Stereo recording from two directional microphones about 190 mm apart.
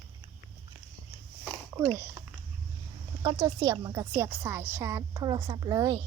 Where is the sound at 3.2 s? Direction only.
20° right (ahead or behind).